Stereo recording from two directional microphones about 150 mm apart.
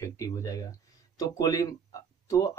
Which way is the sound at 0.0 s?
20° left (ahead or behind).